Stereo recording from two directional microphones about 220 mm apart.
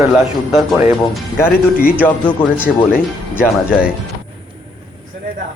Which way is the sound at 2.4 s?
5° left (ahead or behind).